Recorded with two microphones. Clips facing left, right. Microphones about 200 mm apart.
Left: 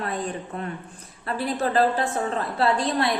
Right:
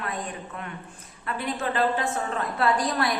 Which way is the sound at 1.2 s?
35° left (ahead or behind).